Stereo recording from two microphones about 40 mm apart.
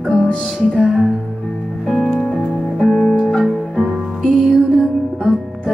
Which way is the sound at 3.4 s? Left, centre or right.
Centre.